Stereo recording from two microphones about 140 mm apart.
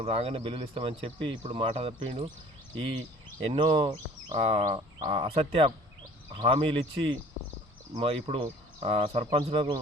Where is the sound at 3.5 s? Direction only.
40° right (ahead or behind).